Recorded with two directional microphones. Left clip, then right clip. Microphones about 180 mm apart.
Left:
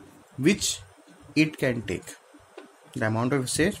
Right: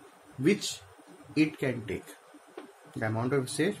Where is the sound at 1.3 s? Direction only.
65° left (ahead or behind).